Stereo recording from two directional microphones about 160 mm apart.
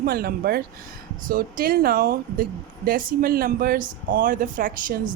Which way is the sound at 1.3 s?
65° right (ahead or behind).